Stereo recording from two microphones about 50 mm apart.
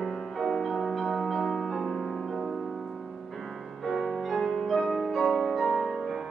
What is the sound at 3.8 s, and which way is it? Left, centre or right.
Music, centre.